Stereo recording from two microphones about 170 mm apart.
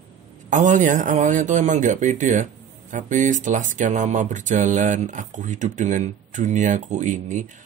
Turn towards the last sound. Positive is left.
turn(degrees=-45)  # may be behind; listen again after turning